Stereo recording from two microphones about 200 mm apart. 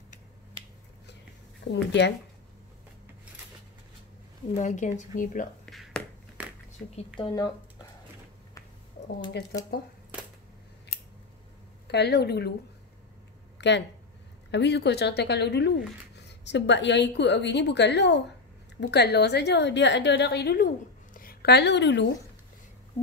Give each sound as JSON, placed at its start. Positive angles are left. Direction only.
{"t": 1.6, "sound": "a woman's voice", "side_deg": 60}
{"t": 4.6, "sound": "a woman's voice", "side_deg": 40}
{"t": 5.7, "sound": "finger snapping", "side_deg": 0}
{"t": 7.2, "sound": "speech", "side_deg": 25}
{"t": 11.9, "sound": "a woman's voice", "side_deg": 55}
{"t": 13.6, "sound": "a woman's voice", "side_deg": 60}